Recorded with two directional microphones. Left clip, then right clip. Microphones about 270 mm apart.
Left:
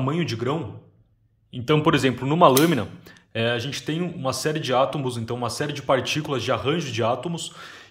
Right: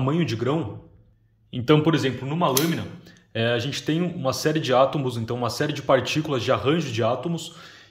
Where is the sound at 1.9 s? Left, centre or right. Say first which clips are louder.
Left 3 dB; centre.